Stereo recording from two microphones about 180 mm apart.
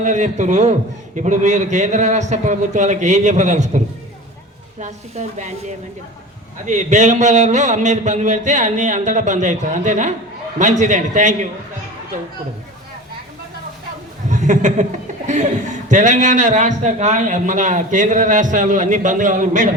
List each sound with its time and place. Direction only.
0.0 s a man's voice: 40° right (ahead or behind)
4.8 s a man's voice: 40° right (ahead or behind)
6.7 s a man's voice: 40° right (ahead or behind)
14.3 s chuckle: 45° right (ahead or behind)
15.9 s a man's voice: 45° right (ahead or behind)